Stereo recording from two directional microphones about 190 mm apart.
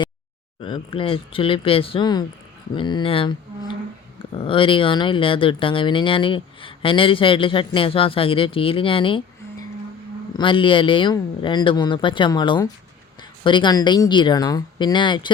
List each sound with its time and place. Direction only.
0.6 s speech: 25° left (ahead or behind)